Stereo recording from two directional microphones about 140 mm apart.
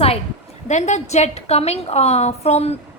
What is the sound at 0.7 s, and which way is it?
A woman's voice, 55° left (ahead or behind).